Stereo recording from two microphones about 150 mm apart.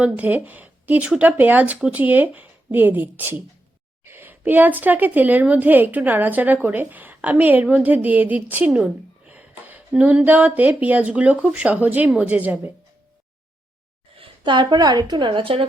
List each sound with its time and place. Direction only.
0.0 s a woman's voice: 10° right (ahead or behind)
14.2 s a woman's voice: 30° right (ahead or behind)